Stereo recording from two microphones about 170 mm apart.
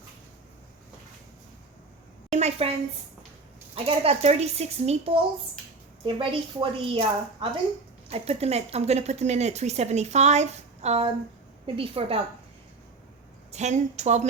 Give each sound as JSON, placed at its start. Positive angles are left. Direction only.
{"t": 2.3, "sound": "a sound", "side_deg": -40}
{"t": 3.8, "sound": "speech", "side_deg": -35}
{"t": 13.5, "sound": "a woman's voice", "side_deg": -45}